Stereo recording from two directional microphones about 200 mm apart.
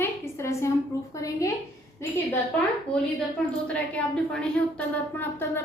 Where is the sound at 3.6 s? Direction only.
5° left (ahead or behind).